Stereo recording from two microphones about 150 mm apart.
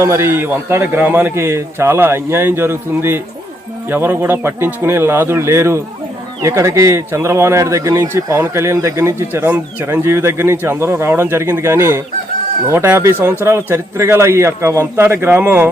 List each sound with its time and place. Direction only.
0.0 s speech: 15° right (ahead or behind)